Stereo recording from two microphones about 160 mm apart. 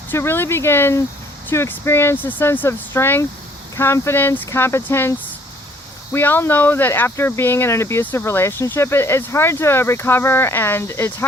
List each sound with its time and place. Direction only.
0.1 s speech: 15° left (ahead or behind)
6.1 s speech: 15° left (ahead or behind)